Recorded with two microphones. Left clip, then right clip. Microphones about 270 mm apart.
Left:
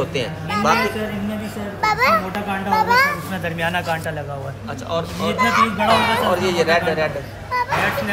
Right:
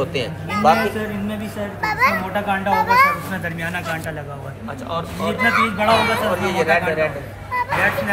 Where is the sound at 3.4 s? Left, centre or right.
Left.